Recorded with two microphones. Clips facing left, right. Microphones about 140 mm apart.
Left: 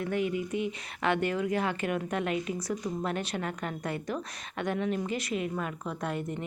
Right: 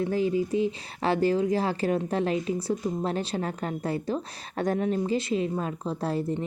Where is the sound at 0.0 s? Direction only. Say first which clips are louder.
Right 5 dB; 30° right (ahead or behind).